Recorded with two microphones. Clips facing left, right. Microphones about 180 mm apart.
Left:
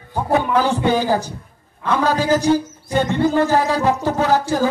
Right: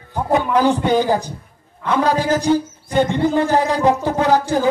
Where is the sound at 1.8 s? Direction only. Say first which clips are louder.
Right 1 dB; 15° right (ahead or behind).